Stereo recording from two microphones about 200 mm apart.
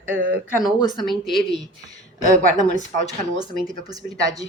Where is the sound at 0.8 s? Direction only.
20° left (ahead or behind).